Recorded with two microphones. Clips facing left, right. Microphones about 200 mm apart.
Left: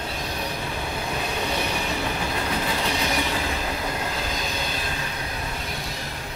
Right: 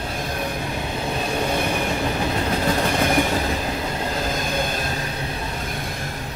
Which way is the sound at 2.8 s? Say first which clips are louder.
Right 6 dB; 50° right (ahead or behind).